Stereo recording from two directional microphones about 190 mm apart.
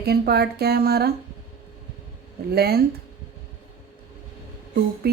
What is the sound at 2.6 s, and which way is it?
Speech, 55° right (ahead or behind).